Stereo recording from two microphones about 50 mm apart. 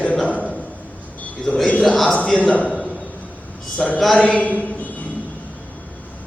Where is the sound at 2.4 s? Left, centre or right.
Left.